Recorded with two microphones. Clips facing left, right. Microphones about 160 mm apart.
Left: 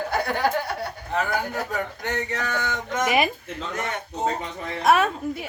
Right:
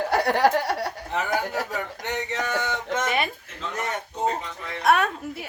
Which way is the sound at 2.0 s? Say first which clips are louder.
Right 2 dB; 20° right (ahead or behind).